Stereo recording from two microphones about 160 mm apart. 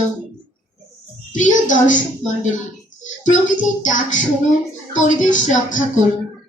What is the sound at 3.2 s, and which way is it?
Speech, 50° left (ahead or behind).